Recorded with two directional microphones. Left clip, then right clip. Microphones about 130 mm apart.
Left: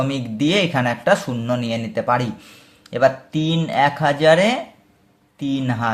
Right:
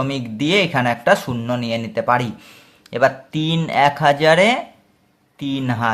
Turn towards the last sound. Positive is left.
turn(degrees=-20)  # may be behind; listen again after turning